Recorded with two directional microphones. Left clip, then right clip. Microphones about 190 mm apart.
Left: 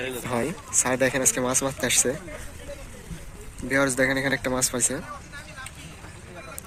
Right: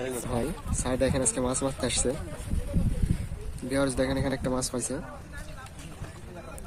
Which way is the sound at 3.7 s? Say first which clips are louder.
Left 5 dB; centre (ahead or behind).